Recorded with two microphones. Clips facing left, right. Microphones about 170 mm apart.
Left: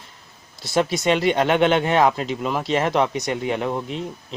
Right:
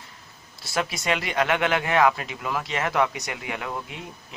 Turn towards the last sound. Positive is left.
turn(degrees=25)  # may be behind; listen again after turning